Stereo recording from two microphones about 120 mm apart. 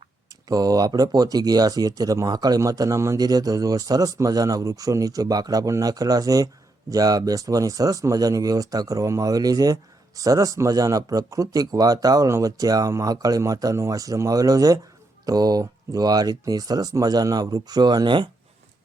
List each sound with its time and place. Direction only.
0.4 s speech: 30° right (ahead or behind)